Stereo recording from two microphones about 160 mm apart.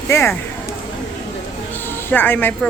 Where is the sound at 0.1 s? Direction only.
15° left (ahead or behind).